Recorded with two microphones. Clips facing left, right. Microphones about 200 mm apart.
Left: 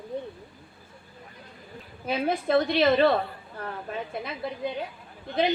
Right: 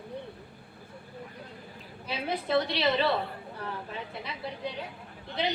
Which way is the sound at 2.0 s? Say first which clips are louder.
Left 6 dB; 50° left (ahead or behind).